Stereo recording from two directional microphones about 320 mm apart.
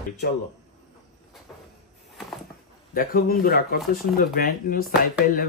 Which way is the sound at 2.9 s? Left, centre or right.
Left.